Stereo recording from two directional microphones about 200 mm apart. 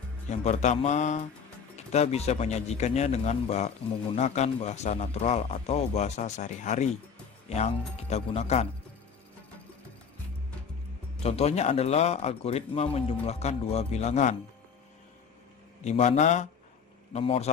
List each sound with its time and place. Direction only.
0.3 s a man's voice: 35° left (ahead or behind)
11.2 s a man's voice: 30° left (ahead or behind)
15.8 s a man's voice: 35° left (ahead or behind)